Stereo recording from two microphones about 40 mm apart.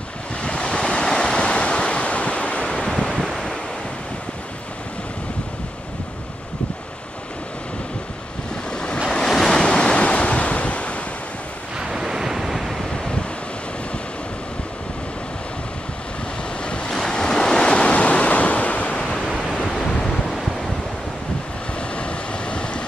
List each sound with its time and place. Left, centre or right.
0.4 s waves: left
8.6 s waves: left
11.8 s waves: centre
16.6 s waves: left
19.1 s waves: centre
20.2 s wind: centre
21.7 s vehicle: left